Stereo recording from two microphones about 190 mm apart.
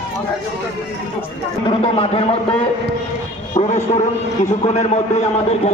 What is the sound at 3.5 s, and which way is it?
A man's voice, 40° left (ahead or behind).